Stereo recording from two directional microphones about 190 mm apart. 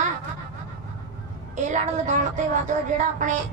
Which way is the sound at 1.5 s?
40° right (ahead or behind).